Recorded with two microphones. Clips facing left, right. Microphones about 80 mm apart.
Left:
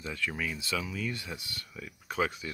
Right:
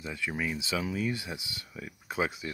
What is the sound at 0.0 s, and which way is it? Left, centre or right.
Speech, centre.